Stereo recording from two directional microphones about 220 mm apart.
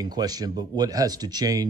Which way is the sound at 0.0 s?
20° right (ahead or behind).